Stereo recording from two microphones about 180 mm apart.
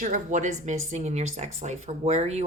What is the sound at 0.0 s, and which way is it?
A woman's voice, 45° right (ahead or behind).